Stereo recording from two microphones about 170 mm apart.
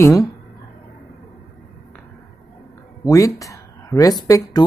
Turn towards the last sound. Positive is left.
turn(degrees=20)  # may be behind; listen again after turning